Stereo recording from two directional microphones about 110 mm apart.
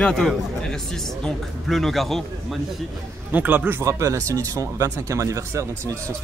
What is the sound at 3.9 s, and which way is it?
Speech, 30° right (ahead or behind).